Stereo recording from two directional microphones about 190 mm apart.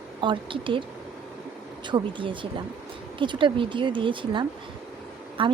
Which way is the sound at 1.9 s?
25° right (ahead or behind).